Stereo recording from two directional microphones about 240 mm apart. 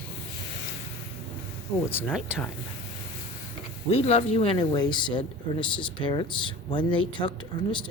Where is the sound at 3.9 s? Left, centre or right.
Left.